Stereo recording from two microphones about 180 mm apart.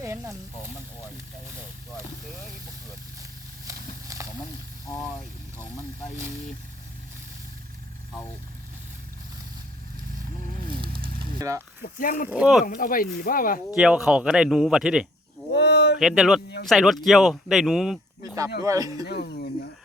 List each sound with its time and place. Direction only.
0.0 s snake: 15° right (ahead or behind)
3.7 s a sound: 20° right (ahead or behind)
5.5 s speech: 15° right (ahead or behind)
10.8 s a sound: 55° right (ahead or behind)
11.2 s a sound: 20° right (ahead or behind)
11.8 s speech: 50° left (ahead or behind)
12.3 s speech: 5° right (ahead or behind)
12.6 s speech: 50° left (ahead or behind)
13.7 s speech: 5° right (ahead or behind)
15.5 s a sound: 70° left (ahead or behind)
16.0 s speech: centre (ahead or behind)
18.6 s speech: 20° right (ahead or behind)
19.0 s speech: 70° left (ahead or behind)